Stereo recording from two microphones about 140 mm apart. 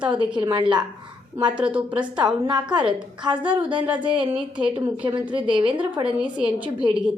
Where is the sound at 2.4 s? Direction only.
35° right (ahead or behind).